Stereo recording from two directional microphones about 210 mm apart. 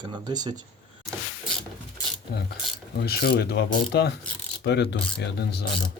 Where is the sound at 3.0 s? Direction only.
50° left (ahead or behind).